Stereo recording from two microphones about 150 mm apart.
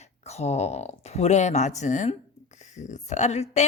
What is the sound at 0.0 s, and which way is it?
Speech, 45° left (ahead or behind).